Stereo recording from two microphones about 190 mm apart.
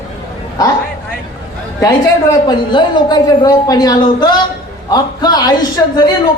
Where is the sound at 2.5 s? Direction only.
25° left (ahead or behind).